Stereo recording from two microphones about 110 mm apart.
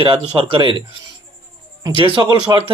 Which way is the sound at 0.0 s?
50° right (ahead or behind).